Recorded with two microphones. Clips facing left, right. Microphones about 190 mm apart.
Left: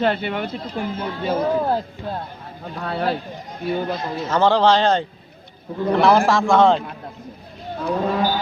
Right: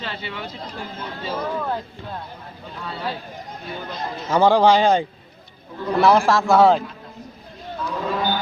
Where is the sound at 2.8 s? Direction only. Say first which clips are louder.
Left 7 dB; 60° left (ahead or behind).